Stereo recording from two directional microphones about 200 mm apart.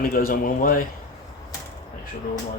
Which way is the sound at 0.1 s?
45° left (ahead or behind).